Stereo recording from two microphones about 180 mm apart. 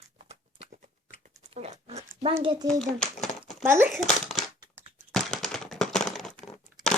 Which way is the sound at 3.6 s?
15° right (ahead or behind).